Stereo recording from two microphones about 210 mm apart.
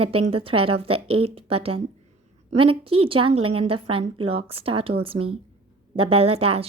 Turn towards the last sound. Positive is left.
turn(degrees=-30)  # may be behind; listen again after turning